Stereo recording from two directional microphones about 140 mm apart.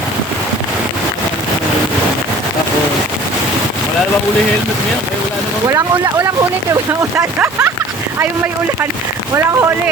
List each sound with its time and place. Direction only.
7.3 s speech: 10° right (ahead or behind)
9.3 s speech: 20° right (ahead or behind)